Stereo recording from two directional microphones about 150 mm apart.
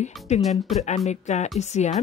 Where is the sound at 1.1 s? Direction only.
50° left (ahead or behind).